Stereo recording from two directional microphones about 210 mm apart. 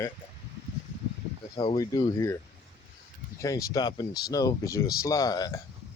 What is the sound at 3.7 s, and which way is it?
Speech, 20° left (ahead or behind).